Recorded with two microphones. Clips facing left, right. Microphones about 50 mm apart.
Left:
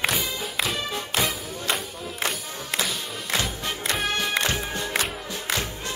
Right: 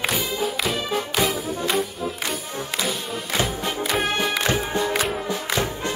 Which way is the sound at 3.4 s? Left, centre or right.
Centre.